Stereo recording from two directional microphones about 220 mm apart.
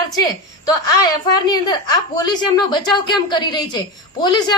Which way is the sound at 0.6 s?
15° left (ahead or behind).